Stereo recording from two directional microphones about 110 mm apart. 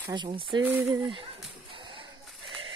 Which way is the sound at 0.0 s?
45° right (ahead or behind).